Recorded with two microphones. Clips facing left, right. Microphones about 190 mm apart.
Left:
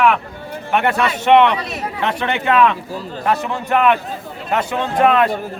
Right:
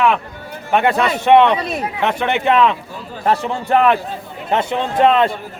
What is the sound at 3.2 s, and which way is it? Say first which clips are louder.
Speech: right 2 dB; 30° right (ahead or behind).